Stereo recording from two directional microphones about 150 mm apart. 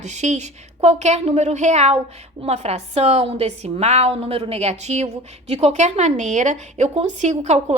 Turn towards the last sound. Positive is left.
turn(degrees=-50)  # may be behind; listen again after turning